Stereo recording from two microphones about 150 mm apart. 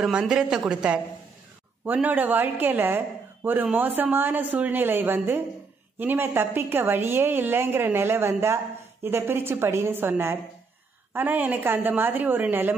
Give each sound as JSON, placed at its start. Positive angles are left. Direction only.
{"t": 0.0, "sound": "a woman's voice", "side_deg": -5}